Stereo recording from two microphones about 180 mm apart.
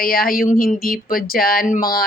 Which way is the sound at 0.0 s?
55° left (ahead or behind).